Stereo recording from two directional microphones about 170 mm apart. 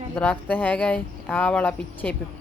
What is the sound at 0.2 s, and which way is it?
Speech, 10° left (ahead or behind).